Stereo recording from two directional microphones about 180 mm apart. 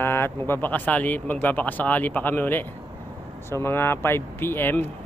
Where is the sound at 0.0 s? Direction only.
10° left (ahead or behind).